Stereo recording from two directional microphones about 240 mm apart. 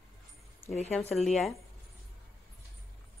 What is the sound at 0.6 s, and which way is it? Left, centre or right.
Speech, left.